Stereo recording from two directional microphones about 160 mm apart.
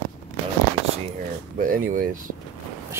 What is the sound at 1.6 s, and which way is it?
Speech, 60° right (ahead or behind).